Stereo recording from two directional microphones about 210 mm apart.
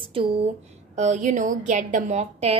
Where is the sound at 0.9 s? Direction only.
35° right (ahead or behind).